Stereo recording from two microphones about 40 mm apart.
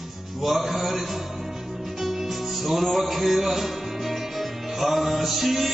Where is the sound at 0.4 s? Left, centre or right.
Centre.